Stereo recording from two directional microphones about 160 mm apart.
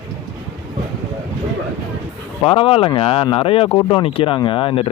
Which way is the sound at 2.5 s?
35° left (ahead or behind).